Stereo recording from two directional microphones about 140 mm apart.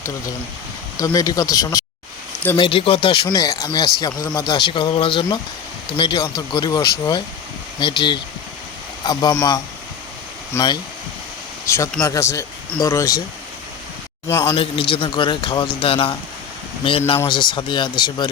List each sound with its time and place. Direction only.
0.9 s speech: 25° left (ahead or behind)
2.6 s a man's voice: 40° left (ahead or behind)
3.2 s a man's voice: 25° left (ahead or behind)
7.8 s a man's voice: 35° left (ahead or behind)
14.3 s speech: 20° left (ahead or behind)
14.5 s a man's voice: 40° left (ahead or behind)
17.2 s a man's voice: 35° left (ahead or behind)